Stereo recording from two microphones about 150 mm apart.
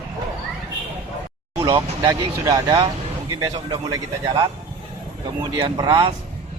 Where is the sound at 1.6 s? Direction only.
30° right (ahead or behind).